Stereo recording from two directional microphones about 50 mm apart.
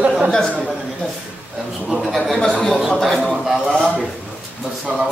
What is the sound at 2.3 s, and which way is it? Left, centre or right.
Speech, centre.